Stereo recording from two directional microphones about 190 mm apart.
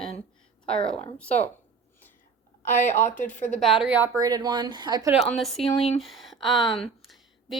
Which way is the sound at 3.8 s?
10° right (ahead or behind).